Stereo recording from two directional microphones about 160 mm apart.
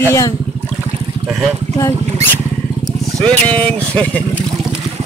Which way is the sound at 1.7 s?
15° left (ahead or behind).